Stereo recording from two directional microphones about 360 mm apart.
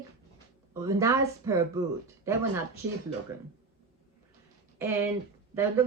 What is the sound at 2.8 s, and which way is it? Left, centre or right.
Speech, right.